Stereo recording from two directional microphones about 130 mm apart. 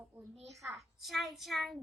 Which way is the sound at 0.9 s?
Centre (ahead or behind).